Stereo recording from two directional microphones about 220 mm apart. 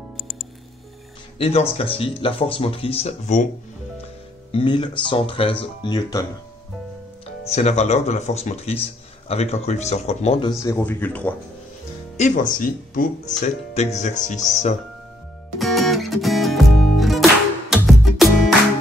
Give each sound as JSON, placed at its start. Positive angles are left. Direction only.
{"t": 0.2, "sound": "music", "side_deg": 0}
{"t": 1.4, "sound": "speech", "side_deg": 25}
{"t": 4.5, "sound": "speech", "side_deg": 25}
{"t": 7.4, "sound": "speech", "side_deg": 30}
{"t": 10.6, "sound": "speech", "side_deg": 10}
{"t": 12.2, "sound": "speech", "side_deg": 35}
{"t": 15.6, "sound": "music", "side_deg": 0}